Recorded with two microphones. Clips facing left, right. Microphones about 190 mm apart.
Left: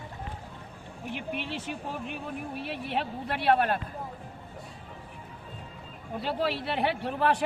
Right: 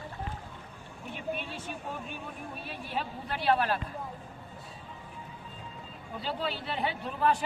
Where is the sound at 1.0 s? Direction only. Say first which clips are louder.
Left 2 dB; 75° left (ahead or behind); by 3.7 s 55° left (ahead or behind).